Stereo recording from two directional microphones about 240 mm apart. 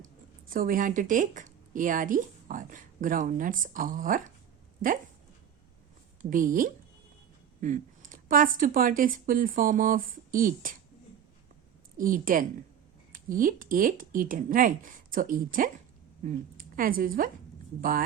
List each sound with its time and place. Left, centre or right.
0.5 s a woman's voice: right
6.3 s a woman's voice: right
11.9 s a woman's voice: right